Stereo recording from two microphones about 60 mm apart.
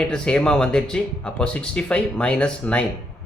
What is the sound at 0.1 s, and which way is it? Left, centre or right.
Speech, centre.